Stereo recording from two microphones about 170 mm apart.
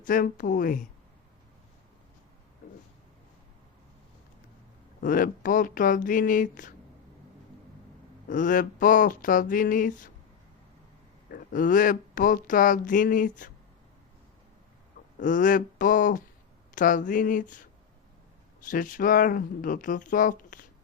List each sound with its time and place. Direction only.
0.0 s speech: 55° left (ahead or behind)
4.9 s speech: 55° left (ahead or behind)
8.3 s speech: 50° left (ahead or behind)
11.3 s speech: 55° left (ahead or behind)
15.2 s speech: 50° left (ahead or behind)